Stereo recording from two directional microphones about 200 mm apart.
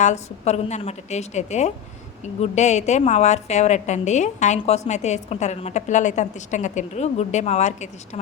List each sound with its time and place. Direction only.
0.0 s a woman's voice: 35° left (ahead or behind)